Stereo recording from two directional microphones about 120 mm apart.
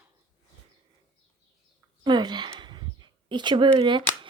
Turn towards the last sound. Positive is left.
turn(degrees=-40)  # may be behind; listen again after turning